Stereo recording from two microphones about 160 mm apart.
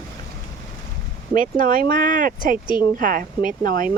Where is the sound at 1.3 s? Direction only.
60° right (ahead or behind).